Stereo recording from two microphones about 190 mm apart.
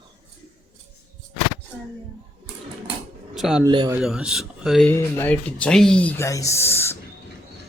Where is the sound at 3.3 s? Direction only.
Centre (ahead or behind).